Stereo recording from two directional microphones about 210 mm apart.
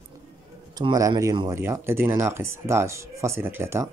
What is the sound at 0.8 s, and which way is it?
Speech, 15° right (ahead or behind).